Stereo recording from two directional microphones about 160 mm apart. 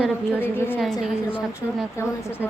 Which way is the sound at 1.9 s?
15° left (ahead or behind).